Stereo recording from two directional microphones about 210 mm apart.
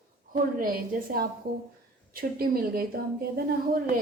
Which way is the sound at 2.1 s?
45° right (ahead or behind).